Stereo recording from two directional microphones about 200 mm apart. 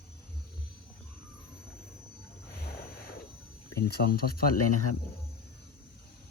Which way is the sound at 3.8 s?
50° left (ahead or behind).